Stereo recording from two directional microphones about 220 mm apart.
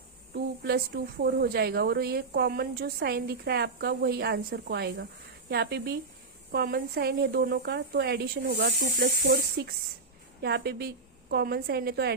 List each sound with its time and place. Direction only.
0.3 s a woman's voice: 45° right (ahead or behind)